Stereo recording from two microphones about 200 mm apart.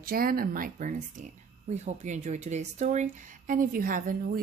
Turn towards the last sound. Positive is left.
turn(degrees=-45)  # may be behind; listen again after turning